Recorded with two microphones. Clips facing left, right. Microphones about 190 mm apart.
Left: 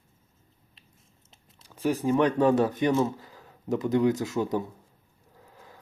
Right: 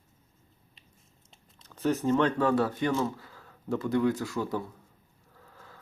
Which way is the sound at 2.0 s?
15° left (ahead or behind).